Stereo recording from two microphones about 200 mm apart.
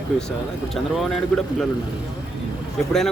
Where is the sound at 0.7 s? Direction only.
Centre (ahead or behind).